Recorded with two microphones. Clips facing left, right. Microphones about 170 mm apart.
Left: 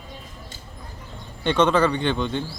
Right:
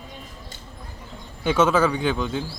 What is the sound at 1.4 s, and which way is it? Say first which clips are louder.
A man's voice: even; 5° right (ahead or behind).